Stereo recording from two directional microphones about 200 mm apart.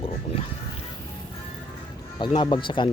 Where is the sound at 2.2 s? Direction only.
25° left (ahead or behind).